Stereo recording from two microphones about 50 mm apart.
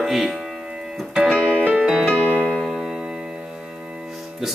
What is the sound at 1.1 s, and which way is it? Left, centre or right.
Music, centre.